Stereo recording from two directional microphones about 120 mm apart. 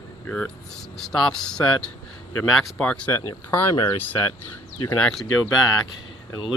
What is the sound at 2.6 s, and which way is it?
Speech, 10° left (ahead or behind).